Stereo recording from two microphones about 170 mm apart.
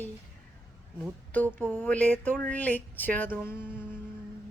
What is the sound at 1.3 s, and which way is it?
Speech, 10° left (ahead or behind).